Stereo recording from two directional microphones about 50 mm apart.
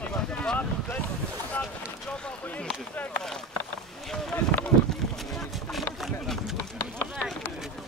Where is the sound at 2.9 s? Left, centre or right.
Left.